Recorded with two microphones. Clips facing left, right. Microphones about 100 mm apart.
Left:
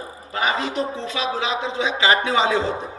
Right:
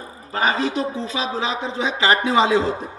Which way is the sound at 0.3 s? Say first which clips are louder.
Right 2 dB; 35° right (ahead or behind).